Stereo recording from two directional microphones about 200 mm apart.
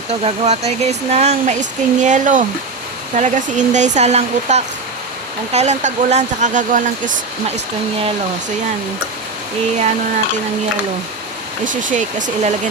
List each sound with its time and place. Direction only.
0.1 s speech: 35° right (ahead or behind)
11.6 s speech: 40° right (ahead or behind)